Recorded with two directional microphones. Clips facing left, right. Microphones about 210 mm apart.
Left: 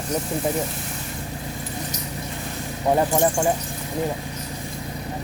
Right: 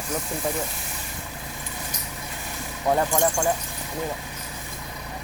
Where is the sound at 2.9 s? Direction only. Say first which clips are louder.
Left 3 dB; 20° left (ahead or behind).